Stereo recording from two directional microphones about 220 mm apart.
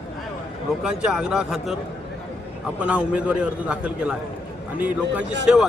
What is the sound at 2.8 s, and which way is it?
A man's voice, 5° right (ahead or behind).